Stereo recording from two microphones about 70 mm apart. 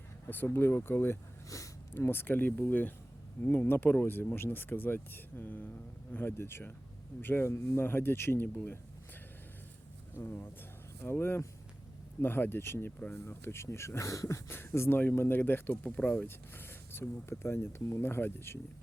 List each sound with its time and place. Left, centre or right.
0.3 s speech: left
1.5 s a sound: left
2.0 s speech: left
7.5 s speech: left
10.2 s speech: left
16.2 s speech: left